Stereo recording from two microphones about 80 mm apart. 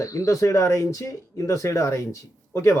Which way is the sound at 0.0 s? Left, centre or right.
Left.